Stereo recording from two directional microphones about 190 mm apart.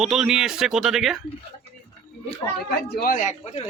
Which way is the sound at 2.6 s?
50° left (ahead or behind).